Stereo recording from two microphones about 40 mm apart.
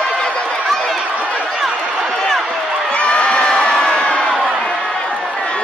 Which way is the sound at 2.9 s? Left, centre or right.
Left.